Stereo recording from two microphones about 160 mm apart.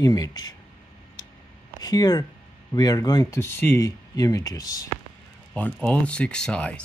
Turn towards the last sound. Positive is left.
turn(degrees=5)  # may be behind; listen again after turning